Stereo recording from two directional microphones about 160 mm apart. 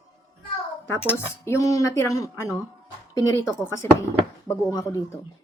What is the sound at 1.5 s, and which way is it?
Speech, 20° left (ahead or behind).